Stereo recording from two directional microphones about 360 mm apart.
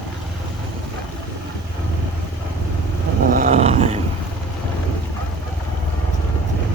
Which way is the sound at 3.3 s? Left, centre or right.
Centre.